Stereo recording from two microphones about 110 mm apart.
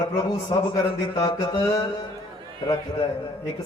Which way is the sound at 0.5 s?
40° left (ahead or behind).